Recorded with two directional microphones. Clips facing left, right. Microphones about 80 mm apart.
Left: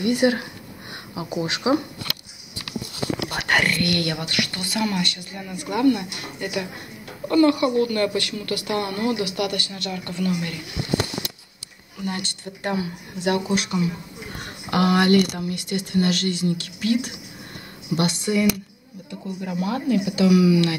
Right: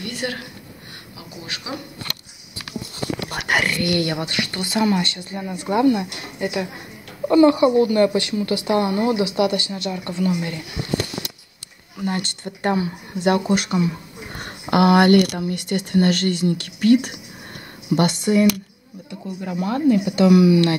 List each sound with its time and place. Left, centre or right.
0.0 s speech: centre
3.3 s a woman's voice: centre; by 10.6 s right
12.0 s speech: right
19.6 s a woman's voice: right
20.2 s speech: right